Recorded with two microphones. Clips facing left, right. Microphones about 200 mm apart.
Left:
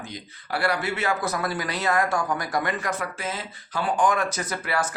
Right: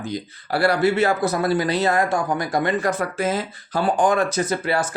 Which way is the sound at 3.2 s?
40° right (ahead or behind).